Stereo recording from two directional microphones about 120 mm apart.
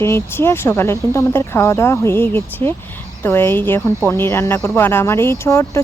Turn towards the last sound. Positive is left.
turn(degrees=25)  # may be behind; listen again after turning